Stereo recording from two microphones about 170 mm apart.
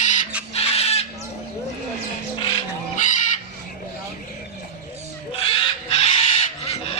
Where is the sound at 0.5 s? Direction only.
35° left (ahead or behind).